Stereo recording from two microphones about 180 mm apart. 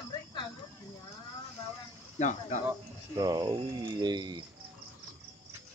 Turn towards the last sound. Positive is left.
turn(degrees=-25)  # may be behind; listen again after turning